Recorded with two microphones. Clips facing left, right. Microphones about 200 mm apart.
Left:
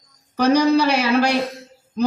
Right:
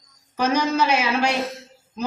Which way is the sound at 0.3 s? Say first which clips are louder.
Left 6 dB; 35° left (ahead or behind).